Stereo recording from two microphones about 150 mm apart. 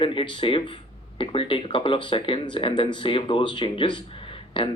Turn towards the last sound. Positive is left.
turn(degrees=35)  # may be behind; listen again after turning